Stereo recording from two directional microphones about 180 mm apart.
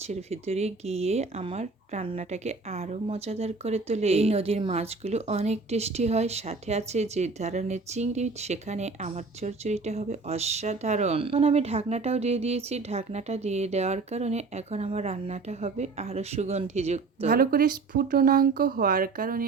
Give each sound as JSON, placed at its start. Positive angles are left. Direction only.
{"t": 0.1, "sound": "speech", "side_deg": -35}
{"t": 17.3, "sound": "speech", "side_deg": -55}